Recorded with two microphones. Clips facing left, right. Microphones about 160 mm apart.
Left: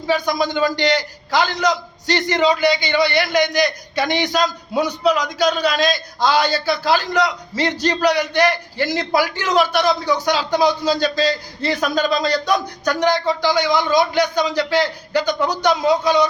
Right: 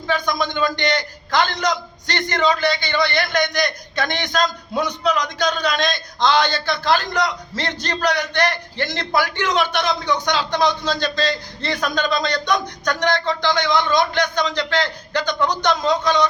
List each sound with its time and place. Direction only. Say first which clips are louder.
0.1 s a man's voice: left 3 dB; 10° left (ahead or behind)